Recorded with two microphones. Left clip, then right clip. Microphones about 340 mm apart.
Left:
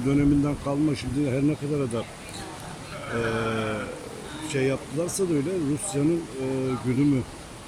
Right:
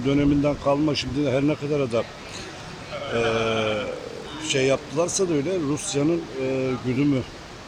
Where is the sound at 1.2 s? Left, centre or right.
Right.